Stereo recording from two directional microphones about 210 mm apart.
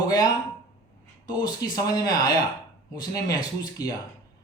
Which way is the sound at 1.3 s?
20° left (ahead or behind).